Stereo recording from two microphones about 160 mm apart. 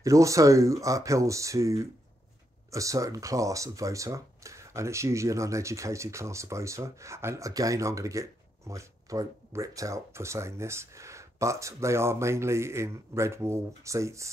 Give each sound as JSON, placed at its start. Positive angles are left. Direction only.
{"t": 0.0, "sound": "speech", "side_deg": -20}